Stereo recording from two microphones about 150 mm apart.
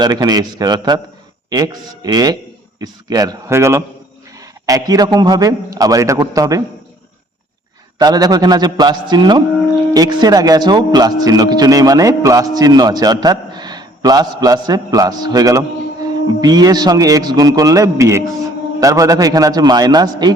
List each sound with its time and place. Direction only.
0.0 s speech: 25° right (ahead or behind)
7.9 s speech: 25° right (ahead or behind)